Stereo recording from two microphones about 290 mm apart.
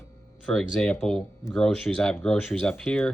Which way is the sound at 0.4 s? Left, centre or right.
Centre.